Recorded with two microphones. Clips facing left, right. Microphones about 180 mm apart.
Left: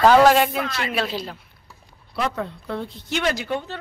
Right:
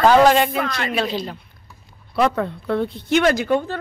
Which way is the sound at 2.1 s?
60° right (ahead or behind).